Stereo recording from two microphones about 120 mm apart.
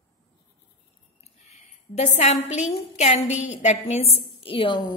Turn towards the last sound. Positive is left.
turn(degrees=45)  # may be behind; listen again after turning